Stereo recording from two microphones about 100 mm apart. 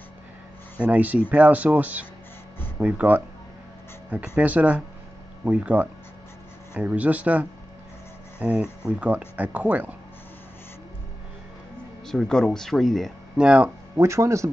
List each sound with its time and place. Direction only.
0.8 s speech: 15° right (ahead or behind)
4.4 s speech: 15° right (ahead or behind)
12.1 s speech: 5° left (ahead or behind)
13.4 s speech: 10° right (ahead or behind)
13.9 s speech: 30° right (ahead or behind)